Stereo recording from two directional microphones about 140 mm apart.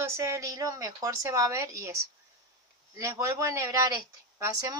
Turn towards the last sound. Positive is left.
turn(degrees=-20)  # may be behind; listen again after turning